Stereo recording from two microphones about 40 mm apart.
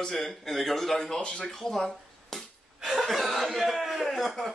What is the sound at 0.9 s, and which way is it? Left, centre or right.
Speech, centre.